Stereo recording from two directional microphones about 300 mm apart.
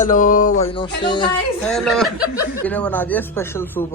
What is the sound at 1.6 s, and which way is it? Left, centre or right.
Speech, centre.